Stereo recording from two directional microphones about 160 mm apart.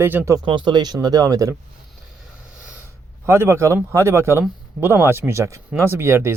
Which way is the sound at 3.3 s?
15° right (ahead or behind).